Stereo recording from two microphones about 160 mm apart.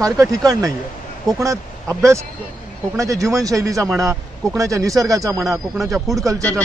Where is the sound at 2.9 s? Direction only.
20° right (ahead or behind).